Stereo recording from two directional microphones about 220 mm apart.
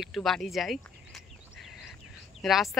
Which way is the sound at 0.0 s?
Centre (ahead or behind).